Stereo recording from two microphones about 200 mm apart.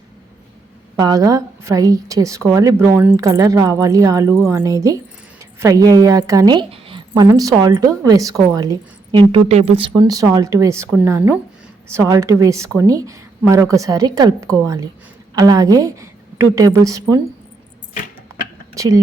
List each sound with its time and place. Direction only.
0.9 s a woman's voice: 20° right (ahead or behind)
7.1 s a woman's voice: 15° right (ahead or behind)
18.7 s a sound: 15° right (ahead or behind)